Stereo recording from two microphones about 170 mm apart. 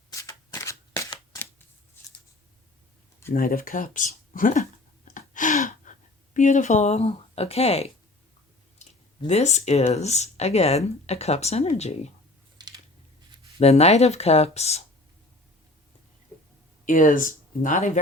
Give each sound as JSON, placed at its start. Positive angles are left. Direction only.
{"t": 0.1, "sound": "shuffling cards", "side_deg": 20}
{"t": 3.3, "sound": "speech", "side_deg": 55}
{"t": 5.1, "sound": "gasp", "side_deg": 50}
{"t": 6.3, "sound": "speech", "side_deg": 45}
{"t": 8.8, "sound": "clicking", "side_deg": 45}
{"t": 9.2, "sound": "speech", "side_deg": 40}
{"t": 12.5, "sound": "a sound", "side_deg": -25}
{"t": 13.6, "sound": "speech", "side_deg": 40}
{"t": 16.8, "sound": "speech", "side_deg": 50}